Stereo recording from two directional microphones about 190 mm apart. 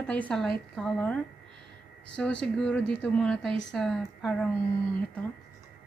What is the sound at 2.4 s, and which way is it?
A woman's voice, 5° left (ahead or behind).